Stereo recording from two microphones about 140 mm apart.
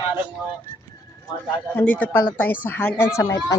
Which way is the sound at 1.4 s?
10° left (ahead or behind).